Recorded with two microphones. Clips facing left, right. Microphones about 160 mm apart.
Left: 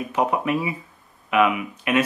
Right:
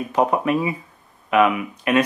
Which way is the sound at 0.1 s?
35° right (ahead or behind).